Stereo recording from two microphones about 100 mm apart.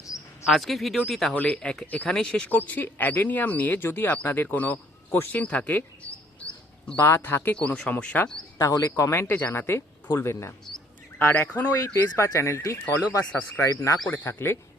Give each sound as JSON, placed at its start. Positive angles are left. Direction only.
{"t": 0.4, "sound": "speech", "side_deg": 0}
{"t": 1.3, "sound": "speech", "side_deg": 15}
{"t": 7.0, "sound": "speech", "side_deg": 25}
{"t": 8.5, "sound": "speech", "side_deg": 40}
{"t": 9.0, "sound": "speech", "side_deg": 25}
{"t": 11.3, "sound": "speech", "side_deg": 15}
{"t": 12.1, "sound": "speech", "side_deg": 30}
{"t": 14.1, "sound": "speech", "side_deg": 20}